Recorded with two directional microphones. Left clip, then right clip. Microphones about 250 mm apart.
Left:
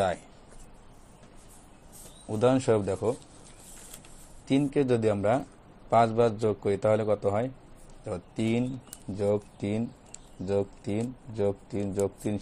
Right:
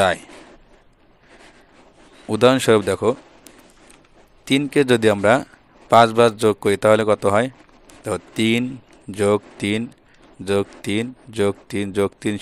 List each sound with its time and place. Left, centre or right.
2.2 s speech: right
4.6 s a man's voice: right
7.2 s speech: right
8.0 s speech: right